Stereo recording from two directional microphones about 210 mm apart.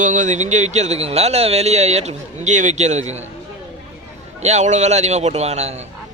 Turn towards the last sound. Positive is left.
turn(degrees=-30)  # may be behind; listen again after turning